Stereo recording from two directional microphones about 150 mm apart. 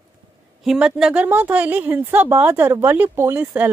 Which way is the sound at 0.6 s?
5° right (ahead or behind).